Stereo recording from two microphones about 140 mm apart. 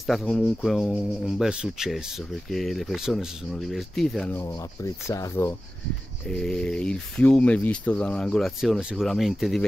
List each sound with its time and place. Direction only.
0.0 s speech: centre (ahead or behind)
4.8 s speech: 25° left (ahead or behind)
6.2 s speech: 5° left (ahead or behind)